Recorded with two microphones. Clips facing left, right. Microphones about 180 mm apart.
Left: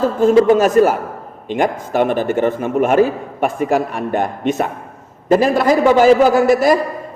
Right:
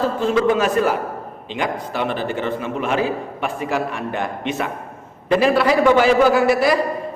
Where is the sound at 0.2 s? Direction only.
45° left (ahead or behind).